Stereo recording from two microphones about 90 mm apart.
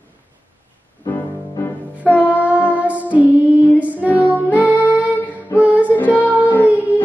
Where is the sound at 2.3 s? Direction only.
15° right (ahead or behind).